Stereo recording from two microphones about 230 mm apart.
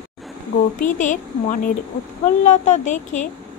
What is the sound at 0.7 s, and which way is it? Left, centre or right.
Speech, left.